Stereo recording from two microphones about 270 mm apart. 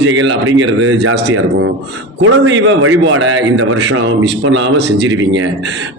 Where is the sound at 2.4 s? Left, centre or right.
Right.